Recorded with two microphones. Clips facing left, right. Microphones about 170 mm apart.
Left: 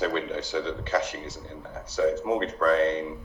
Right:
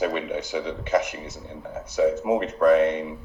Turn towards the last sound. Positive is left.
turn(degrees=-15)  # may be behind; listen again after turning